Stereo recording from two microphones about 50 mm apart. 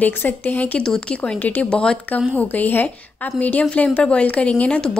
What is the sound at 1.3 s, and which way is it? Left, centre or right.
Speech, left.